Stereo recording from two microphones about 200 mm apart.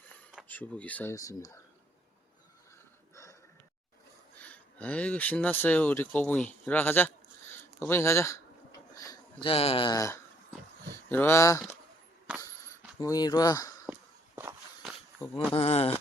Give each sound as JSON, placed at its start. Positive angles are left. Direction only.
{"t": 0.4, "sound": "speech", "side_deg": 10}
{"t": 4.4, "sound": "speech", "side_deg": 5}
{"t": 12.3, "sound": "a sound", "side_deg": -5}
{"t": 13.0, "sound": "speech", "side_deg": 20}
{"t": 13.8, "sound": "walk", "side_deg": -10}
{"t": 15.5, "sound": "speech", "side_deg": 30}